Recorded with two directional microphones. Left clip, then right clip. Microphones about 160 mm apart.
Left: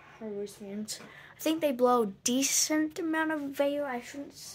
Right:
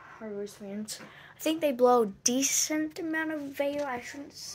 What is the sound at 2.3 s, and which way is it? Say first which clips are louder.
Speech: left 2 dB; 15° left (ahead or behind).